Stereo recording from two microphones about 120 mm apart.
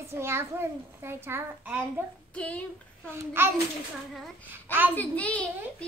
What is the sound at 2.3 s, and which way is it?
Speech, 10° left (ahead or behind).